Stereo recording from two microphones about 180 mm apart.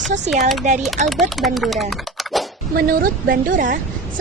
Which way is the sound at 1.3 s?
Centre (ahead or behind).